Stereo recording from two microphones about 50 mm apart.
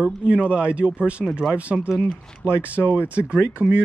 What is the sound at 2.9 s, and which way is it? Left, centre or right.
Speech, right.